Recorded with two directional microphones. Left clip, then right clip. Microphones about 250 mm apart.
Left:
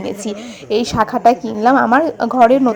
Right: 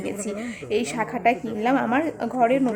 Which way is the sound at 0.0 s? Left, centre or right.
Centre.